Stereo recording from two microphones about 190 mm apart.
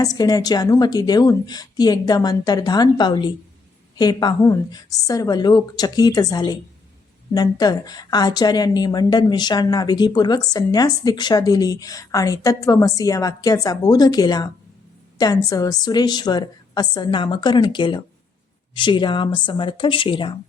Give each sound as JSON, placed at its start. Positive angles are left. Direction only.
{"t": 0.0, "sound": "a woman's voice", "side_deg": 20}